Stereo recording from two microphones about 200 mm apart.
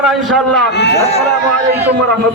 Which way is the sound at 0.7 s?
55° left (ahead or behind).